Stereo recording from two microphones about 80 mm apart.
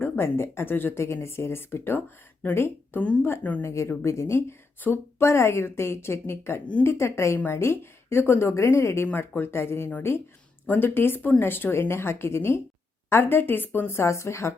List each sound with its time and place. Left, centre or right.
0.0 s a woman's voice: left
9.0 s speech: left